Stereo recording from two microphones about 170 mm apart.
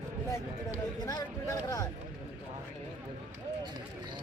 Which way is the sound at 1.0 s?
20° left (ahead or behind).